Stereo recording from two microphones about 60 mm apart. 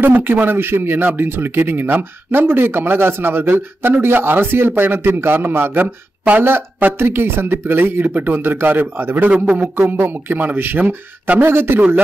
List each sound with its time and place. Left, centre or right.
0.0 s a man's voice: right
6.4 s a man's voice: right
9.3 s a man's voice: right
9.8 s a man's voice: right